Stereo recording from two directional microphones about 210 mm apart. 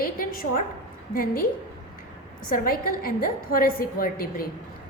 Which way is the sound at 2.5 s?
45° left (ahead or behind).